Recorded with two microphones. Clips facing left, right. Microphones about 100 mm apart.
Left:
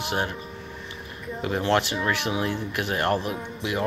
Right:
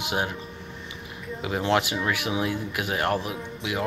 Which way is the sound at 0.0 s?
15° right (ahead or behind).